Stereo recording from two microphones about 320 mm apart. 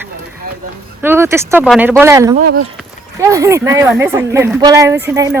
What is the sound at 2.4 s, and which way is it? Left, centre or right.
Speech, right.